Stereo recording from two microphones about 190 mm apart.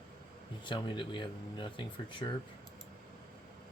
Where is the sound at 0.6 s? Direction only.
25° left (ahead or behind).